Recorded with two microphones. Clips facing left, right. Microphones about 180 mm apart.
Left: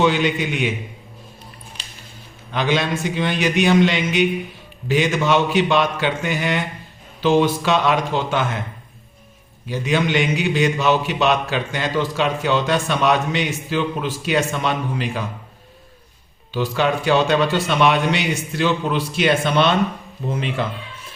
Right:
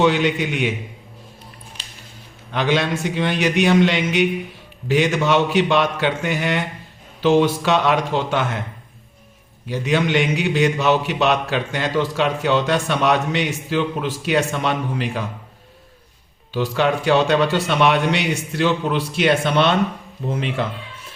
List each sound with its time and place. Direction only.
0.0 s a man's voice: 65° right (ahead or behind)
2.5 s a man's voice: 65° right (ahead or behind)
9.6 s a man's voice: 65° right (ahead or behind)
16.5 s a man's voice: 65° right (ahead or behind)